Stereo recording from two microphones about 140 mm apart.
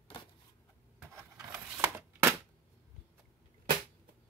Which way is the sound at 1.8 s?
20° right (ahead or behind).